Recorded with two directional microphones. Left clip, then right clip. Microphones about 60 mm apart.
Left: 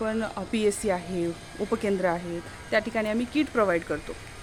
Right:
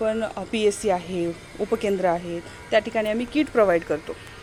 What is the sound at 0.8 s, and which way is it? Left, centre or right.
Speech, centre.